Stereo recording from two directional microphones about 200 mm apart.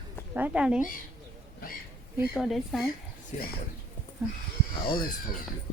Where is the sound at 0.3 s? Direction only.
5° right (ahead or behind).